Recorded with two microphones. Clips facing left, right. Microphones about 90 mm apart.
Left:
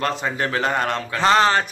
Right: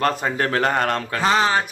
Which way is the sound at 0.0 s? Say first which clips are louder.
Right 2 dB; 45° right (ahead or behind).